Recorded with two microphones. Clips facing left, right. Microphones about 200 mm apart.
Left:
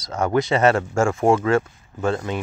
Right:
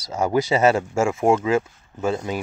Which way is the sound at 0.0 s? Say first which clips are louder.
Even; 10° right (ahead or behind).